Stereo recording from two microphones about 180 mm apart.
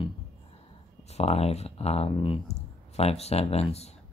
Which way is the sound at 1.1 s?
35° left (ahead or behind).